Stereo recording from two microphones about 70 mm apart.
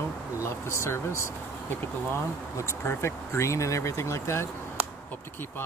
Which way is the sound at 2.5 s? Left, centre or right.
Left.